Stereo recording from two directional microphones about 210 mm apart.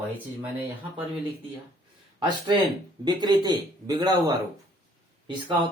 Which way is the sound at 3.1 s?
20° right (ahead or behind).